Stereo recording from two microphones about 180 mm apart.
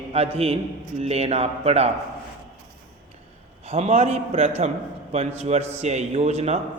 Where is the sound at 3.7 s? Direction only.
35° right (ahead or behind).